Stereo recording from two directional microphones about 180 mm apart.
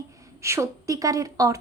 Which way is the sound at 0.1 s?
15° right (ahead or behind).